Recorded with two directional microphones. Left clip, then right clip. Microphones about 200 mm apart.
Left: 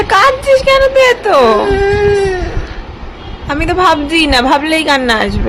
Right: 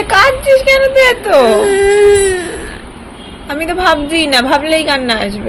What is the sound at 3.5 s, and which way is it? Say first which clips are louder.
A woman's voice: left 2 dB; 15° left (ahead or behind).